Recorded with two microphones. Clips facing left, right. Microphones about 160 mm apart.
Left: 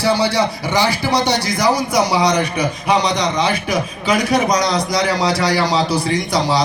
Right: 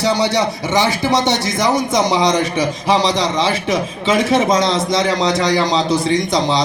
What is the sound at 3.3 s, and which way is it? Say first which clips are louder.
A man's voice: right 1 dB; 25° right (ahead or behind).